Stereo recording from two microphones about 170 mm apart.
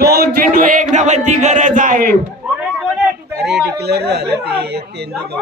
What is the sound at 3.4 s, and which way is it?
Battle cry, 75° right (ahead or behind).